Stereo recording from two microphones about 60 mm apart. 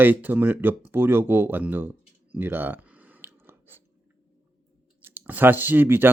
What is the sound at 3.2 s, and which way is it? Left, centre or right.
Biting, right.